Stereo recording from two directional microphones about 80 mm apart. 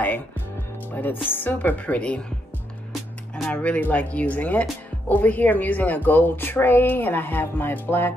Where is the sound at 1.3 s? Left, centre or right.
Left.